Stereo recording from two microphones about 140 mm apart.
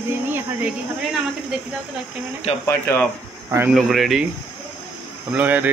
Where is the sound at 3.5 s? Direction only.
15° right (ahead or behind).